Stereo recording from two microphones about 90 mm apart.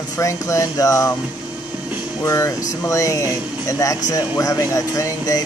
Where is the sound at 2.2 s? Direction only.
35° left (ahead or behind).